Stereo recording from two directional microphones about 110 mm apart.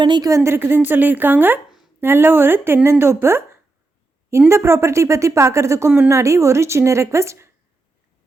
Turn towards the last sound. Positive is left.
turn(degrees=-25)  # may be behind; listen again after turning